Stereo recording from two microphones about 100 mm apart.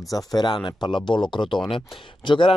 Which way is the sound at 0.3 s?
45° left (ahead or behind).